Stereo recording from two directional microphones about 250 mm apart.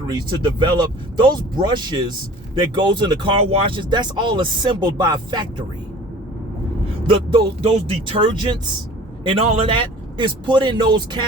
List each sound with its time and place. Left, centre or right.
0.1 s speech: centre
7.1 s a man's voice: right